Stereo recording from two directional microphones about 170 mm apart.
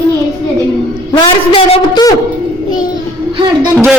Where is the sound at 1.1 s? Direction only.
30° left (ahead or behind).